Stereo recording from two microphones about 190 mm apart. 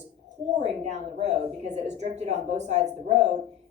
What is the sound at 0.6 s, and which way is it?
Speech, 35° right (ahead or behind).